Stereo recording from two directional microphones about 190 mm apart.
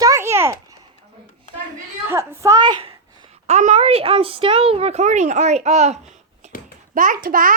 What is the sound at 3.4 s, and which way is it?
A woman's voice, 40° right (ahead or behind).